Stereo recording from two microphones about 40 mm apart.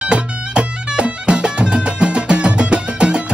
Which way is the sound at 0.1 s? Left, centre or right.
Right.